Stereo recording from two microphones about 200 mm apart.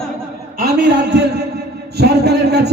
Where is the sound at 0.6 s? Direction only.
55° right (ahead or behind).